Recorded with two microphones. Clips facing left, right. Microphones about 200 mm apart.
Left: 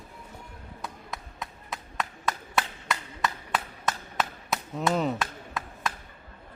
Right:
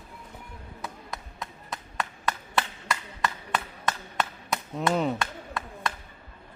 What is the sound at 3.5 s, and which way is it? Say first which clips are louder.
Chop: even; 5° left (ahead or behind).